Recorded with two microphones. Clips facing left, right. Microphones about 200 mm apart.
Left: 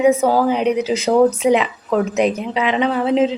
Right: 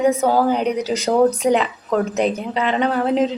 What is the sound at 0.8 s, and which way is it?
Speech, 35° right (ahead or behind).